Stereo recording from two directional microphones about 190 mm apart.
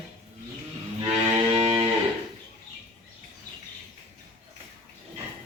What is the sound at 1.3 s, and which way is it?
Music, 30° right (ahead or behind).